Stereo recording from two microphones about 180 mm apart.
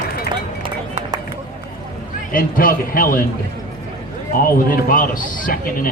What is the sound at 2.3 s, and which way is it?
Speech, 50° left (ahead or behind).